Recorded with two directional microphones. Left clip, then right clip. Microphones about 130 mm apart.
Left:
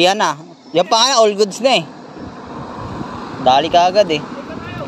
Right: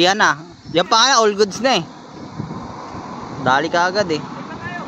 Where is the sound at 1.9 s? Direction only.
40° left (ahead or behind); by 3.0 s 60° left (ahead or behind).